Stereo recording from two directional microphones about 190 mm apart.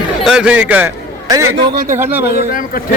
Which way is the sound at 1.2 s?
20° right (ahead or behind).